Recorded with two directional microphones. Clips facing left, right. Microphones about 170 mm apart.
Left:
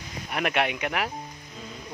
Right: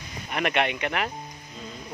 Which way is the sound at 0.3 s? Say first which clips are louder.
Right 1 dB; centre (ahead or behind).